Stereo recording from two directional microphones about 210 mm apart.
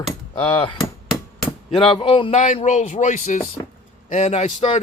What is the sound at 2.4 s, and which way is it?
A man's voice, 35° left (ahead or behind).